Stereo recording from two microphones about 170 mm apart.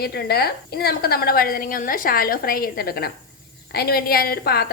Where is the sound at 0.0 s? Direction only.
70° left (ahead or behind).